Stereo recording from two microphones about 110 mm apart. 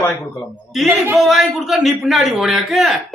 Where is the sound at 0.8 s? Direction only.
25° right (ahead or behind).